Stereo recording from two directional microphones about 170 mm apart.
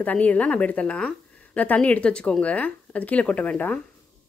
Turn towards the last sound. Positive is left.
turn(degrees=10)  # may be behind; listen again after turning